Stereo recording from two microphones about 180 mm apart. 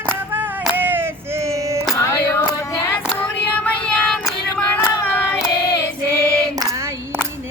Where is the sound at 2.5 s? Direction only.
15° left (ahead or behind).